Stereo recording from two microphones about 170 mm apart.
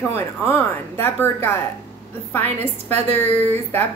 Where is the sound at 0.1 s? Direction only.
10° left (ahead or behind).